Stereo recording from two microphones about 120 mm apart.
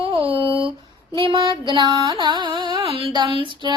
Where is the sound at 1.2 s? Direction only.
45° right (ahead or behind).